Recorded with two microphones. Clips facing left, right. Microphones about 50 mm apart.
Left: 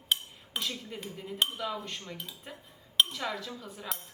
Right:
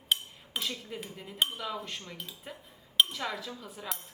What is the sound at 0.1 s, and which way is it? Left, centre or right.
Cutlery, centre.